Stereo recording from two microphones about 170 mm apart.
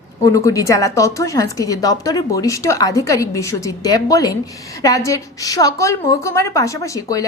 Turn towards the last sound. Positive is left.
turn(degrees=20)  # may be behind; listen again after turning